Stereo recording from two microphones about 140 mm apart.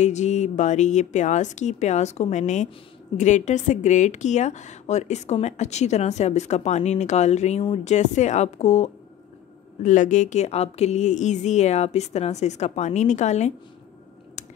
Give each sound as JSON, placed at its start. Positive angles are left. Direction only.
{"t": 0.0, "sound": "speech", "side_deg": 55}
{"t": 9.8, "sound": "speech", "side_deg": 60}
{"t": 14.4, "sound": "a sound", "side_deg": 55}